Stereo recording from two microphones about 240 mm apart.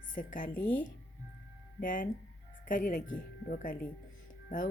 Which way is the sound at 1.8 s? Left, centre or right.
Left.